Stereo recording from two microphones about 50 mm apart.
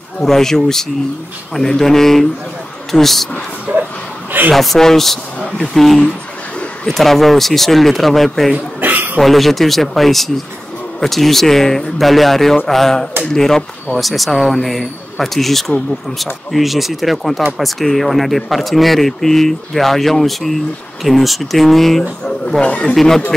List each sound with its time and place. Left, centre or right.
0.2 s speech: centre
3.7 s a sound: right
4.6 s a man's voice: centre
6.9 s speech: centre
8.8 s a sound: right
9.2 s speech: centre
13.9 s speech: centre
22.6 s speech: left
22.9 s speech: centre